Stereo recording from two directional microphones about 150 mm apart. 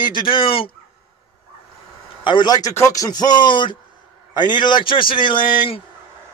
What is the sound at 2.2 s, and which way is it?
A man's voice, 30° left (ahead or behind).